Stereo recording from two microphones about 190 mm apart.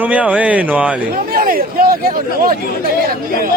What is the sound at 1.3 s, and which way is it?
Speech, 50° right (ahead or behind).